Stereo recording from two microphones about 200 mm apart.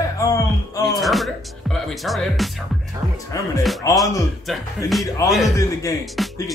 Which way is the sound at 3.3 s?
15° left (ahead or behind).